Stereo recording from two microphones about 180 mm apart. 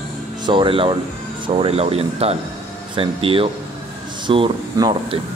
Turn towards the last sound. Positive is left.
turn(degrees=-25)  # may be behind; listen again after turning